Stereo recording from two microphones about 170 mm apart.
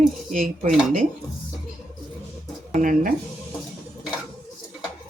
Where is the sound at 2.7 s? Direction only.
50° right (ahead or behind).